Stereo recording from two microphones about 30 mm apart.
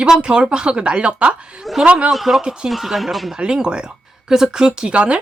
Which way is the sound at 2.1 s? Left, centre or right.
Centre.